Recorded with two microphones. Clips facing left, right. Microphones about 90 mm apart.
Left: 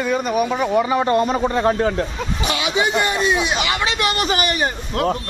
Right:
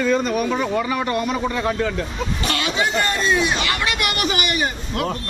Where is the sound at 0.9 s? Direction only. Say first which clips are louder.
Left 5 dB; 30° left (ahead or behind).